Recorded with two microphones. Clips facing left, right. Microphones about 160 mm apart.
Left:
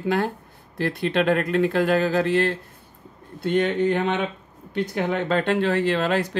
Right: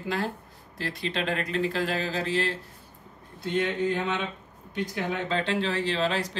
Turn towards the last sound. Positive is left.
turn(degrees=55)  # may be behind; listen again after turning